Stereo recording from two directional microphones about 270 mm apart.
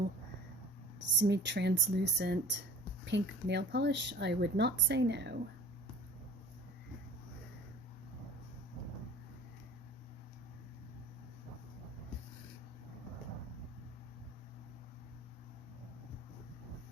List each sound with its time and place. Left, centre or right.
1.2 s speech: right